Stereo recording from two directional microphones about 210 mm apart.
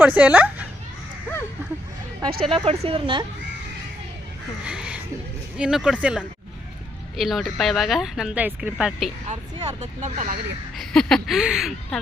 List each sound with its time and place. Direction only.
0.0 s speech: 10° right (ahead or behind)
2.4 s speech: 25° right (ahead or behind)
4.6 s speech: 5° right (ahead or behind)
9.2 s speech: 30° right (ahead or behind)
10.8 s speech: centre (ahead or behind)